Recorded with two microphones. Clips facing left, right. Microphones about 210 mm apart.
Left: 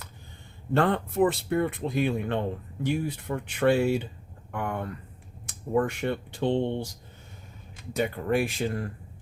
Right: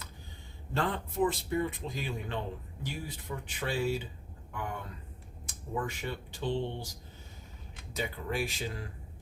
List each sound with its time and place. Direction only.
0.7 s speech: 60° left (ahead or behind)
7.9 s speech: 60° left (ahead or behind)